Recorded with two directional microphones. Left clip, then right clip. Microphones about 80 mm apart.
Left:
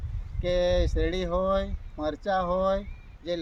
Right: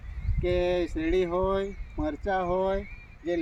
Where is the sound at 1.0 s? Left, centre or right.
Left.